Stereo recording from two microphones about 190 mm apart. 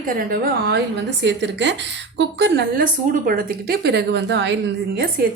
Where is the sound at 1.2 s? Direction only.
70° right (ahead or behind).